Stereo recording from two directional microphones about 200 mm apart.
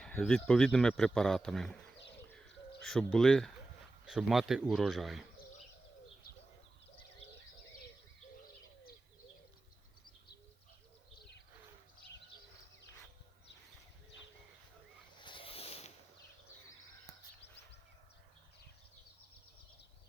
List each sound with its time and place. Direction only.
0.0 s speech: 5° left (ahead or behind)
2.8 s speech: 5° left (ahead or behind)
15.2 s a sound: 25° left (ahead or behind)